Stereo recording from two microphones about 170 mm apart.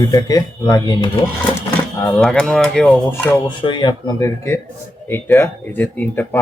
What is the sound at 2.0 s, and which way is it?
Speech, 10° left (ahead or behind).